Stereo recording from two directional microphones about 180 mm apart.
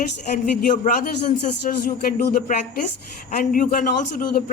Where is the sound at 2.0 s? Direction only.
50° left (ahead or behind).